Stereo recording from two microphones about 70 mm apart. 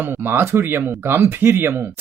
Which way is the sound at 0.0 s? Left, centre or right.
Right.